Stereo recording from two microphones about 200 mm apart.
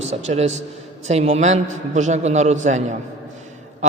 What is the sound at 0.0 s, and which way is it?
A man's voice, 35° right (ahead or behind).